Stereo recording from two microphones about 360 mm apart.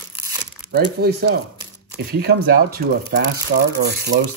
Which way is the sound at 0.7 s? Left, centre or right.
Right.